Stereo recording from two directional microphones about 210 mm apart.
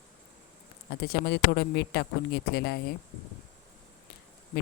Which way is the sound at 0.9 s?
50° left (ahead or behind).